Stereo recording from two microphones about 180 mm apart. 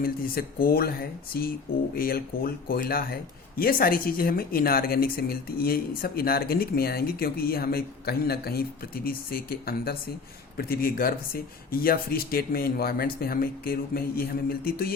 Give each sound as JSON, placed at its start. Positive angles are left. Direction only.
{"t": 0.0, "sound": "a woman's voice", "side_deg": 55}